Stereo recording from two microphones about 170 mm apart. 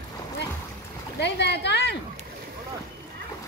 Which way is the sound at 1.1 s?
85° left.